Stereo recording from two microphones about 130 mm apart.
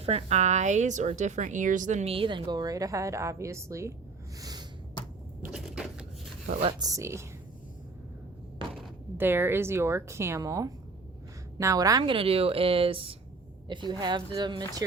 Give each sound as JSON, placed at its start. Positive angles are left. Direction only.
{"t": 0.0, "sound": "a woman's voice", "side_deg": -55}
{"t": 2.1, "sound": "a woman's voice", "side_deg": -40}
{"t": 4.4, "sound": "a sound", "side_deg": -30}
{"t": 5.5, "sound": "a sound", "side_deg": -5}
{"t": 6.6, "sound": "speech", "side_deg": -45}
{"t": 6.8, "sound": "a woman's voice", "side_deg": -25}
{"t": 9.1, "sound": "a woman's voice", "side_deg": -15}
{"t": 12.0, "sound": "a woman's voice", "side_deg": -45}